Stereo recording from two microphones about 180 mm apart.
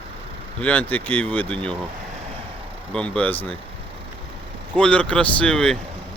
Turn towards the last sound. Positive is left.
turn(degrees=5)  # may be behind; listen again after turning